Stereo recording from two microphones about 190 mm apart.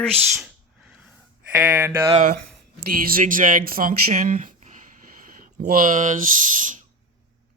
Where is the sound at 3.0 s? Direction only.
45° right (ahead or behind).